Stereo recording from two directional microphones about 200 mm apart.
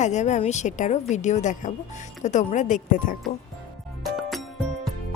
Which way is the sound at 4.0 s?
Centre (ahead or behind).